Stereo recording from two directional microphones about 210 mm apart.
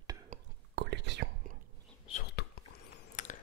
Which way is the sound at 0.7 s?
55° right (ahead or behind).